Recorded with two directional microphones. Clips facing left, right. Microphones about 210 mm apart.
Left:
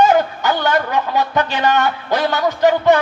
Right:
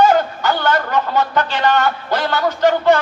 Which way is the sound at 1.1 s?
15° left (ahead or behind).